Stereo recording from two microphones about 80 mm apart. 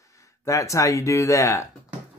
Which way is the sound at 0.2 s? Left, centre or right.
Left.